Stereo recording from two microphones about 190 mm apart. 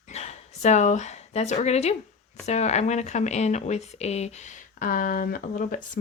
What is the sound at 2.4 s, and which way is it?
Cutlery, 35° left (ahead or behind).